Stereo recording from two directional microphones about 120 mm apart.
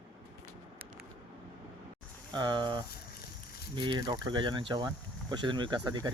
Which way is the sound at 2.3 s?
40° right (ahead or behind).